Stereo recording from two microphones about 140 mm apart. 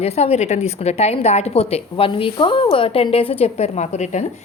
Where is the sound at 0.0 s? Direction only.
50° left (ahead or behind).